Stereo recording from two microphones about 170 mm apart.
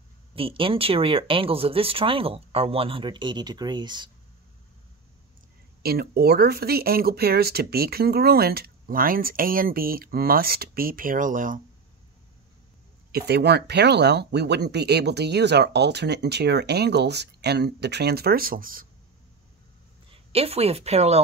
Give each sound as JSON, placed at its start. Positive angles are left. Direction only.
{"t": 0.4, "sound": "speech", "side_deg": -30}
{"t": 5.8, "sound": "speech", "side_deg": -65}
{"t": 13.1, "sound": "speech", "side_deg": -75}
{"t": 20.3, "sound": "speech", "side_deg": -35}